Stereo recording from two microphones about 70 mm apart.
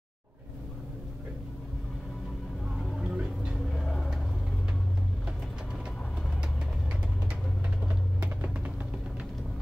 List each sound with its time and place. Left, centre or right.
3.0 s music: centre
3.7 s a sound: centre
7.9 s music: right